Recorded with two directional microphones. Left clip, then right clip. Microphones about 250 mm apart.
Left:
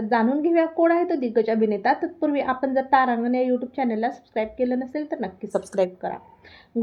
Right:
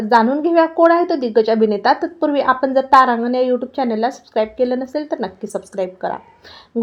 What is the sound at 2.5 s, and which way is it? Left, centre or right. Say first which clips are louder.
Speech: right 10 dB; right.